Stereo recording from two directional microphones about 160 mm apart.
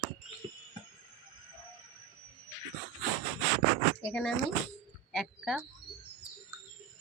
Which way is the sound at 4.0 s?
5° left (ahead or behind).